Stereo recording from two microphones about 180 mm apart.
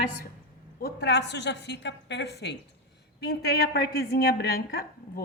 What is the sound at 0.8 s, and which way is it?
A woman's voice, 70° left (ahead or behind).